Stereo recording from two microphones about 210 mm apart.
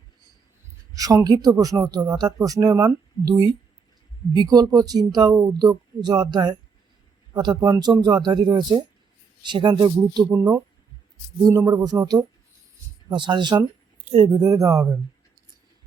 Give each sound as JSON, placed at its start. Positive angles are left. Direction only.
{"t": 0.9, "sound": "speech", "side_deg": -15}